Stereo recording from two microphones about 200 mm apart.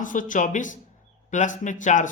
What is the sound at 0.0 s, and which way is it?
Speech, 40° left (ahead or behind).